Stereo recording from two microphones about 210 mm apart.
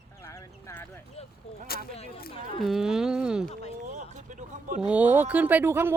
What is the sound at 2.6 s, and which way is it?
Speech, centre (ahead or behind).